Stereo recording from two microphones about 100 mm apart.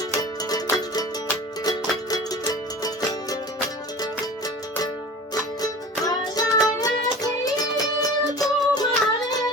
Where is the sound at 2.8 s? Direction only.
40° left (ahead or behind).